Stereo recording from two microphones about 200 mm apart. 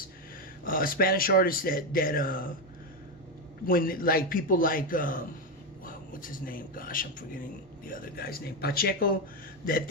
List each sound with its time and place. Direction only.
0.6 s speech: 45° left (ahead or behind)
3.7 s speech: 45° left (ahead or behind)